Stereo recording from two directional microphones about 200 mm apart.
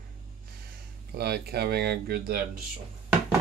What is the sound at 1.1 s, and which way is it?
Speech, 50° right (ahead or behind).